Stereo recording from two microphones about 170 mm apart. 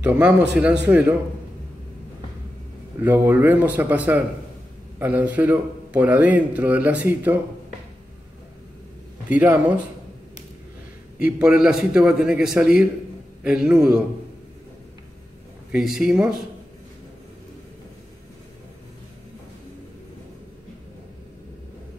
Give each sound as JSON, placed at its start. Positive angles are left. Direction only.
{"t": 0.0, "sound": "a man's voice", "side_deg": -10}
{"t": 3.0, "sound": "a man's voice", "side_deg": -10}
{"t": 9.3, "sound": "a man's voice", "side_deg": -10}
{"t": 11.1, "sound": "a man's voice", "side_deg": -5}
{"t": 15.7, "sound": "a man's voice", "side_deg": -5}